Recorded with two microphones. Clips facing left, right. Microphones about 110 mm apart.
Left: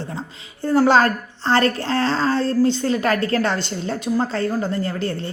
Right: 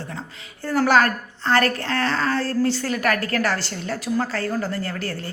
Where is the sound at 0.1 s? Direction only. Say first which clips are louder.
Left 3 dB; 25° left (ahead or behind).